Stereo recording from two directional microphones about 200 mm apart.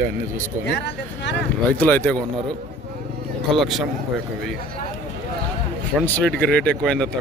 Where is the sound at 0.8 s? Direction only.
60° left (ahead or behind).